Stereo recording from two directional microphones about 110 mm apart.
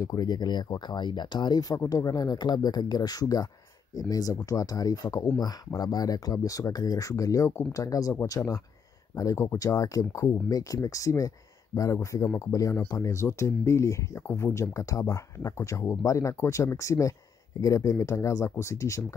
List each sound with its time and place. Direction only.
0.0 s speech: 35° left (ahead or behind)